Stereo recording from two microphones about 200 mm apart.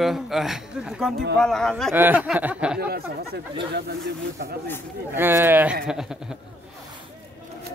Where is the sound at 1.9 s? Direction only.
10° right (ahead or behind).